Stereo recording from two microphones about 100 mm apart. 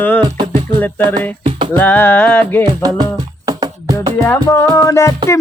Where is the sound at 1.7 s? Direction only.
20° left (ahead or behind).